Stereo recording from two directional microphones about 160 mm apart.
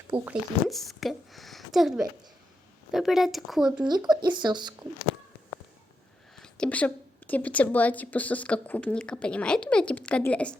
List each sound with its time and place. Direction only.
0.1 s speech: 35° right (ahead or behind)
0.7 s speech: centre (ahead or behind)
3.8 s speech: 25° right (ahead or behind)
6.3 s a woman's voice: 5° left (ahead or behind)